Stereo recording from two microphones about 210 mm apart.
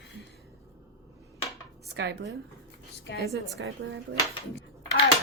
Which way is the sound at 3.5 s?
55° right (ahead or behind).